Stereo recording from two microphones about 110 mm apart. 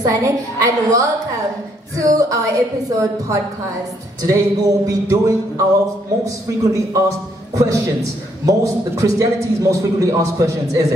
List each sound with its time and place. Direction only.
0.0 s speech: 30° right (ahead or behind)
6.2 s a man's voice: 30° right (ahead or behind)